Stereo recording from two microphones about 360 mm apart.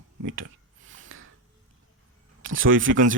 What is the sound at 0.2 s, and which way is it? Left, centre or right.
Speech, right.